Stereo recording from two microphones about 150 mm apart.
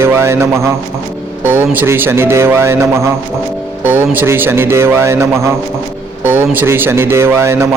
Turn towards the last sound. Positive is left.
turn(degrees=-15)  # may be behind; listen again after turning